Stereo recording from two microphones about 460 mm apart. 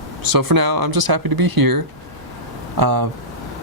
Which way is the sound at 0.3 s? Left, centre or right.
Right.